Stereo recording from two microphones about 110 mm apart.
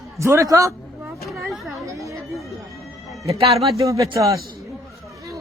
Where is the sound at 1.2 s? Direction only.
Centre (ahead or behind).